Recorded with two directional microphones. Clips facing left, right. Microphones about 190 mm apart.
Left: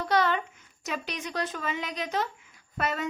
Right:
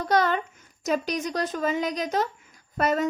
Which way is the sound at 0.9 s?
40° right (ahead or behind).